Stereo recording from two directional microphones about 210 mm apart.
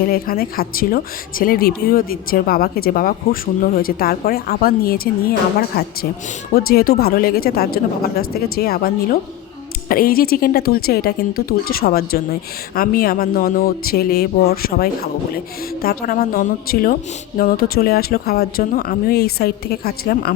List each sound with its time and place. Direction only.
0.0 s speech: 45° left (ahead or behind)
9.9 s speech: 45° left (ahead or behind)